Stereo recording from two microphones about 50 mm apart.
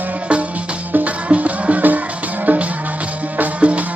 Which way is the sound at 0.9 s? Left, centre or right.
Right.